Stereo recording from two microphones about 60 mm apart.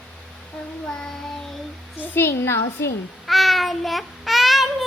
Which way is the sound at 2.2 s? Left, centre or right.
Left.